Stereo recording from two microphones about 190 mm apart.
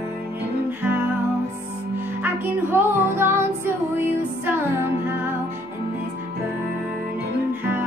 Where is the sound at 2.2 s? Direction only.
10° right (ahead or behind).